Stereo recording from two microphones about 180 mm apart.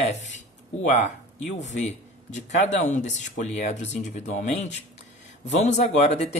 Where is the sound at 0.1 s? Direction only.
40° left (ahead or behind).